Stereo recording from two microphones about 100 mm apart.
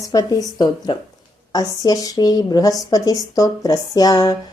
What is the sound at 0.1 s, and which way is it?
Speech, 40° left (ahead or behind).